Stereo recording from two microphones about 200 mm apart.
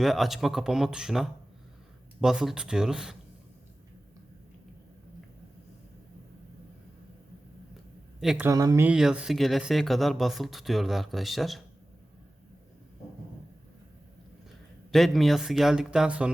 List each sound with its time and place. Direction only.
0.0 s speech: centre (ahead or behind)
8.2 s speech: centre (ahead or behind)
8.4 s speech: 15° right (ahead or behind); by 11.6 s centre (ahead or behind)
14.9 s speech: centre (ahead or behind)